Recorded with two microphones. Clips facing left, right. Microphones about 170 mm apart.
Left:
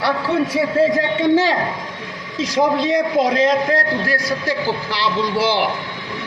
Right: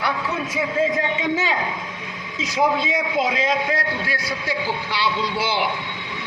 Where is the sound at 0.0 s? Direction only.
35° left (ahead or behind).